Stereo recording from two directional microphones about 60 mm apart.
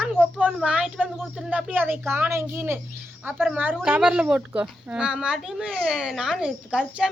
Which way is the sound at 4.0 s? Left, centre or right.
Centre.